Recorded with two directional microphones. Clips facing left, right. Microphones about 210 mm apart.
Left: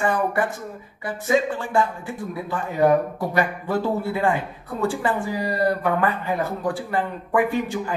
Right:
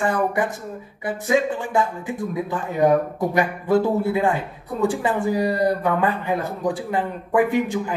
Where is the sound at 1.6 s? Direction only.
15° right (ahead or behind).